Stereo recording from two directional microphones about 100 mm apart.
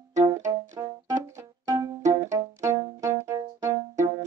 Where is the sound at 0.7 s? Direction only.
30° right (ahead or behind).